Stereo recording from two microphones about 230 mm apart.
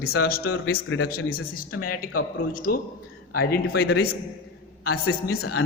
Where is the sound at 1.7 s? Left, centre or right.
Left.